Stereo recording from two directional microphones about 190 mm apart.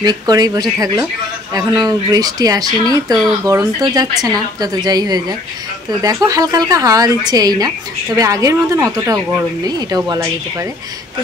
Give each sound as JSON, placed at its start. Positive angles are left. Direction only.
{"t": 0.0, "sound": "a woman's voice", "side_deg": -20}